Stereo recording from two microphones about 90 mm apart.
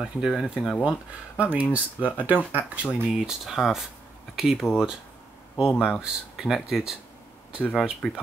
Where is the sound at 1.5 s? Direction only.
15° right (ahead or behind).